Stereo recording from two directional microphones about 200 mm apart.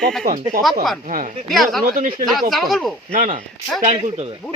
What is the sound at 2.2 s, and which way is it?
Speech, centre (ahead or behind).